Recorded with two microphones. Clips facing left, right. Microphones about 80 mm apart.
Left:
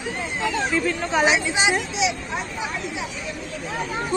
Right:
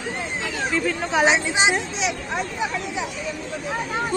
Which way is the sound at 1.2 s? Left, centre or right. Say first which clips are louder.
Right 2 dB; right.